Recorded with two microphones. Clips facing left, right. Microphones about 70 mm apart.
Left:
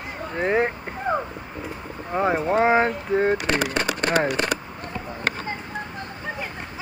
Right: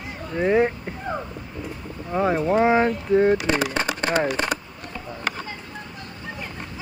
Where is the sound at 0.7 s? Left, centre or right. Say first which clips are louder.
Left 3 dB; left.